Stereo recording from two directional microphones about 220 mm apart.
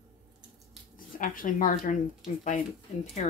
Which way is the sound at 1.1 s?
40° left (ahead or behind).